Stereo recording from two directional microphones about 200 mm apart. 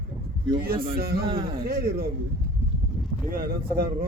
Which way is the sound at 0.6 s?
45° right (ahead or behind).